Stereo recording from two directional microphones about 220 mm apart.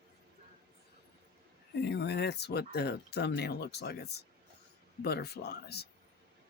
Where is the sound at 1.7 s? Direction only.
50° left (ahead or behind).